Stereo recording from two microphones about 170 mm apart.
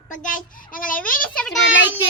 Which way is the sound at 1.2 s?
5° left (ahead or behind).